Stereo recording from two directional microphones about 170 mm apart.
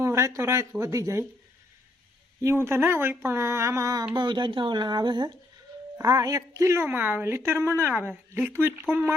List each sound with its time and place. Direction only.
0.0 s a woman's voice: 15° right (ahead or behind)
2.4 s a woman's voice: 15° right (ahead or behind)